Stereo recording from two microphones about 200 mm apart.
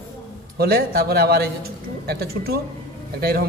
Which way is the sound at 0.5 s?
50° right (ahead or behind).